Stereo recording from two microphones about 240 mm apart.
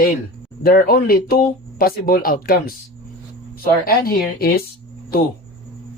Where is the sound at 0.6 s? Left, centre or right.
Left.